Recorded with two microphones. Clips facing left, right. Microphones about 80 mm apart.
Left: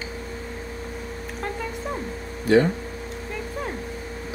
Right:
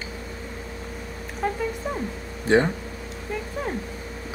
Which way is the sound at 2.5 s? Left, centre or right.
Right.